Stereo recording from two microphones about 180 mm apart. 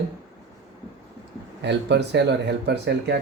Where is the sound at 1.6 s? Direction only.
70° right (ahead or behind).